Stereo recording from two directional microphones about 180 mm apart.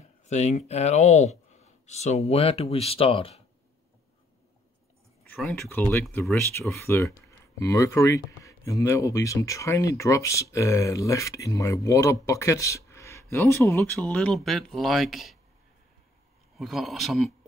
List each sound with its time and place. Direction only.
0.3 s speech: 40° left (ahead or behind)
5.2 s speech: 5° left (ahead or behind)
16.5 s speech: centre (ahead or behind)